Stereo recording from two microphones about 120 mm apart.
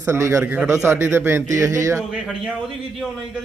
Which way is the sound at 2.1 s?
5° right (ahead or behind).